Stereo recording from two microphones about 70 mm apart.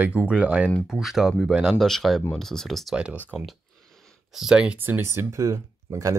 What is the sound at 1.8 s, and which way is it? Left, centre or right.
Speech, centre.